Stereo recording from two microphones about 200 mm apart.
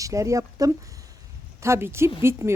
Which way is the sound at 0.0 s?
15° right (ahead or behind).